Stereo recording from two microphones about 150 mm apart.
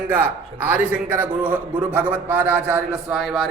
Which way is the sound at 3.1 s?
Centre (ahead or behind).